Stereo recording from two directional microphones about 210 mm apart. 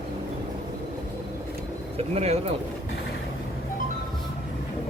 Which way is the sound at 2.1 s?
30° right (ahead or behind).